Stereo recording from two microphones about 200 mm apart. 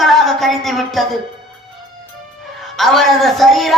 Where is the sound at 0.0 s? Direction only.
Centre (ahead or behind).